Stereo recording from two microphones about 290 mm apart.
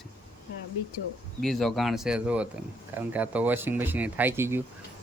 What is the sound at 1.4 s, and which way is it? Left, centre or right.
Speech, centre.